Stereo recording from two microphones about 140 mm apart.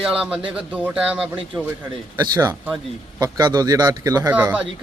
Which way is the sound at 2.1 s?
30° right (ahead or behind).